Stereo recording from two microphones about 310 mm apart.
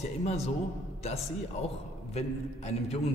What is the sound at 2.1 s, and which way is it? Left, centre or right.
Speech, left.